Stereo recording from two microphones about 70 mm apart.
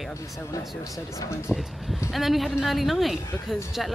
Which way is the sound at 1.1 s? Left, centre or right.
Left.